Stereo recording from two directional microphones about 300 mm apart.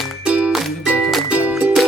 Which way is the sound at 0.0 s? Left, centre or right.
Centre.